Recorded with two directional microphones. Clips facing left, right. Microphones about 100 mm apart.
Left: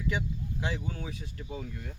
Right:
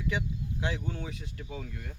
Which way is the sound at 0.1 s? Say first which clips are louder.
Even; centre (ahead or behind).